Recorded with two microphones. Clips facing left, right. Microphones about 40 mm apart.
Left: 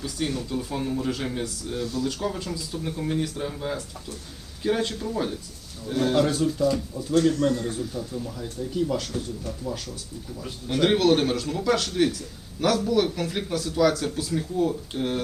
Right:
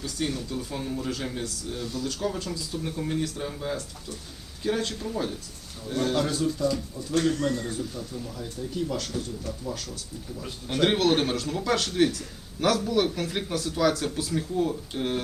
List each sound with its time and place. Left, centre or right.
0.0 s speech: centre
2.2 s speech: centre
7.3 s a man's voice: left
7.8 s speech: centre
10.4 s speech: centre